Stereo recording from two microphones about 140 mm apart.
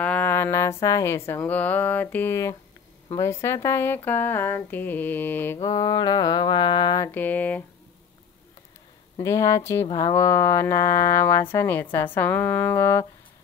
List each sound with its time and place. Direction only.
0.0 s speech: 10° left (ahead or behind)
5.6 s mantra: 25° left (ahead or behind)
7.1 s speech: 15° left (ahead or behind)
9.2 s speech: 20° left (ahead or behind)